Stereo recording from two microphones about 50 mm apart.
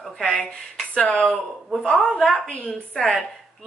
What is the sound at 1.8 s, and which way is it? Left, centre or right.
A woman's voice, centre.